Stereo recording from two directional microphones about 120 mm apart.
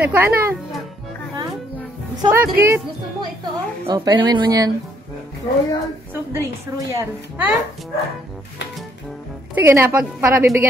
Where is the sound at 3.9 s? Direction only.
35° right (ahead or behind).